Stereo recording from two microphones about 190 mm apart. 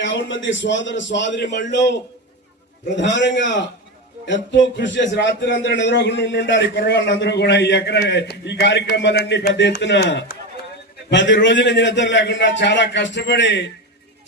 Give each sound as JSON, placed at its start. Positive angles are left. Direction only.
{"t": 0.0, "sound": "a man's voice", "side_deg": 75}